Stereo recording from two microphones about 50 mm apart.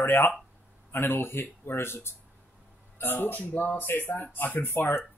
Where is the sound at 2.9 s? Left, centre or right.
Left.